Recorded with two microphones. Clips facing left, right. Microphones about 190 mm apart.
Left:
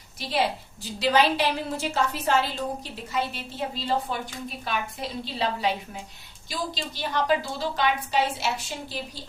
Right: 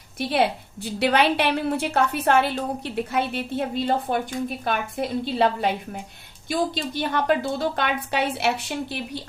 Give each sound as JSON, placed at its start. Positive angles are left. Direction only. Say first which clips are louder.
{"t": 0.2, "sound": "a woman's voice", "louder": "right 4 dB", "side_deg": -60}